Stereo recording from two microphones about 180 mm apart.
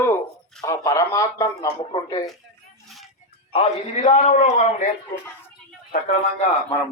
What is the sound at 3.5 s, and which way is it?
A man's voice, 35° left (ahead or behind).